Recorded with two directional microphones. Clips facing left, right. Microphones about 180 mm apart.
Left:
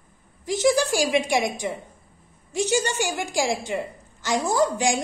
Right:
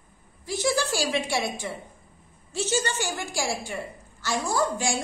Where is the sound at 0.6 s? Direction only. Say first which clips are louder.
Left 5 dB; 15° left (ahead or behind).